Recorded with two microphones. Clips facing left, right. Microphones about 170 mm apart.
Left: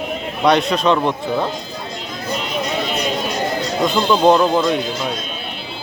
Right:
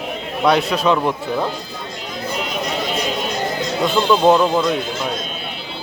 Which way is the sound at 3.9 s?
10° left (ahead or behind).